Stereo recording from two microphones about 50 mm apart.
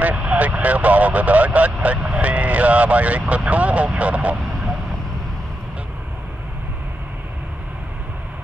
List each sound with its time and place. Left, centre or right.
0.0 s vehicle: right